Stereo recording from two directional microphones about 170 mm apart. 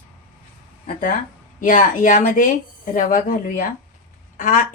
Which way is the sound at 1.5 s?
50° left (ahead or behind).